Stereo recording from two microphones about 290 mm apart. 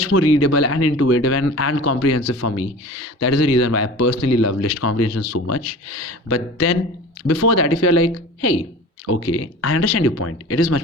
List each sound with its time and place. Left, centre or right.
0.1 s speech: left